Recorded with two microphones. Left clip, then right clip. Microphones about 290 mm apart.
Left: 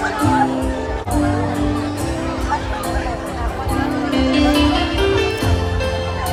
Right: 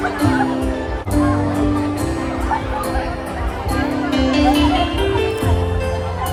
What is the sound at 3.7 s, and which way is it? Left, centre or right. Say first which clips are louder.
Music: right 1 dB; centre.